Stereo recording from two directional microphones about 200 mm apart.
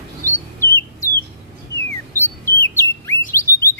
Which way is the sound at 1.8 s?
10° left (ahead or behind).